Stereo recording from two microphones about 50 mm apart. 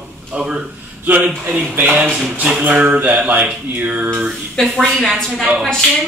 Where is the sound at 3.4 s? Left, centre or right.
Right.